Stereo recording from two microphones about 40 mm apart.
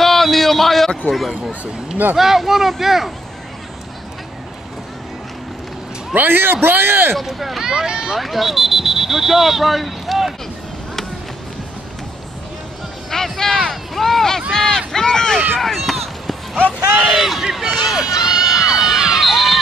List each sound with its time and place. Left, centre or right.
0.0 s a sound: centre
1.0 s speech: centre
6.1 s a man's voice: right
7.2 s speech: centre
7.6 s speech: centre
8.2 s speech: centre
13.1 s speech: centre
15.6 s run: centre
17.1 s speech: centre